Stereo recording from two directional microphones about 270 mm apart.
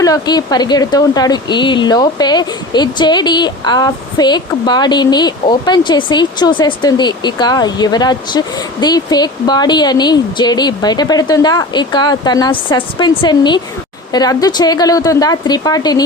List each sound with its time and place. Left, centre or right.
0.0 s a woman's voice: centre